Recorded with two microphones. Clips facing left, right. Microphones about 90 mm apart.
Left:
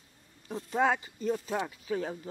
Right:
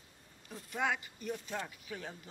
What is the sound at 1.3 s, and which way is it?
Speech, 50° left (ahead or behind).